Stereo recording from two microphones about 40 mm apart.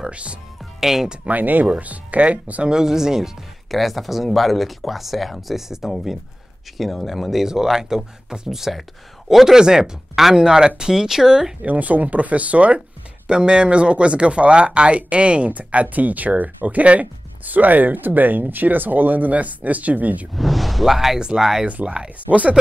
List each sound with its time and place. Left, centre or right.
0.0 s speech: right
0.7 s speech: centre
1.2 s speech: right
2.7 s speech: centre
3.7 s speech: centre
7.4 s speech: centre
11.6 s speech: right
13.3 s speech: right
20.3 s speech: centre
21.8 s speech: right
22.3 s speech: right